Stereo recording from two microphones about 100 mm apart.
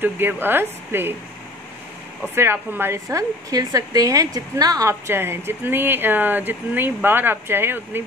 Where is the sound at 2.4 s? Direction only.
25° right (ahead or behind).